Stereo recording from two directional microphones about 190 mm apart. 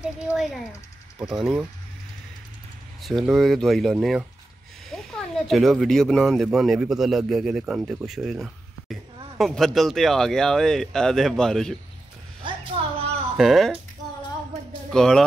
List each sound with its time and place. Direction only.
0.0 s speech: 5° right (ahead or behind)
3.0 s speech: centre (ahead or behind)
13.4 s speech: centre (ahead or behind)
14.9 s speech: 5° left (ahead or behind)